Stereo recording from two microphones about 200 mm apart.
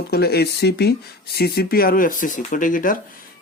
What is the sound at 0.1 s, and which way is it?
Speech, 50° left (ahead or behind).